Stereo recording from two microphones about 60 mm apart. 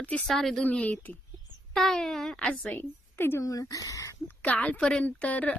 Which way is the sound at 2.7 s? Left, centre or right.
Left.